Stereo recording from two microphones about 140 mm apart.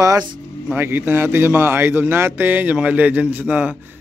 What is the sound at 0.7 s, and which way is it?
A man's voice, 15° right (ahead or behind).